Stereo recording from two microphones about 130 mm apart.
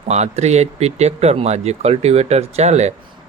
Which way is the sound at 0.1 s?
60° right (ahead or behind).